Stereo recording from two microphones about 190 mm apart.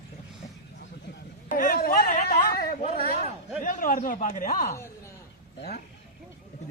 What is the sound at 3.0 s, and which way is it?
Speech, 50° left (ahead or behind).